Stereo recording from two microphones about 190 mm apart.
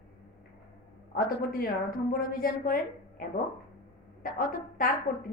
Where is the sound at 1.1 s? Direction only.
50° left (ahead or behind).